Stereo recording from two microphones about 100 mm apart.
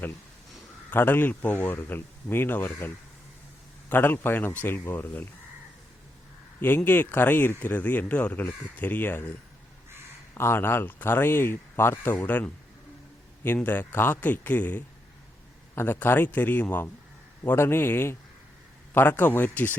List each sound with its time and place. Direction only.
0.9 s speech: 20° left (ahead or behind)
6.6 s speech: 20° left (ahead or behind)
10.3 s a man's voice: 25° left (ahead or behind)